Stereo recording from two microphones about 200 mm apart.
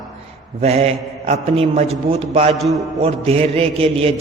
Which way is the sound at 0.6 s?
30° right (ahead or behind).